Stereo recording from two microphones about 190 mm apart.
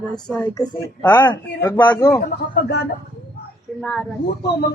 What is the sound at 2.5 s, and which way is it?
Speech, 60° left (ahead or behind).